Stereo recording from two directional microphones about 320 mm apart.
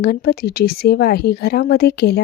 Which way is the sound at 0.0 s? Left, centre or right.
Left.